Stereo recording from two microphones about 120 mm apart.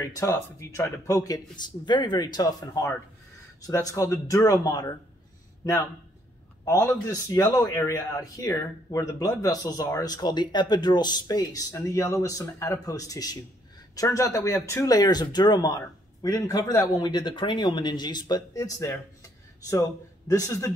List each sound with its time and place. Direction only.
0.0 s a man's voice: 25° left (ahead or behind)
7.1 s speech: 30° left (ahead or behind)
20.2 s a man's voice: 25° left (ahead or behind)